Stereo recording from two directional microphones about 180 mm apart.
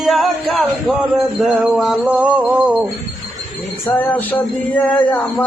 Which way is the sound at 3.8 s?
10° left (ahead or behind).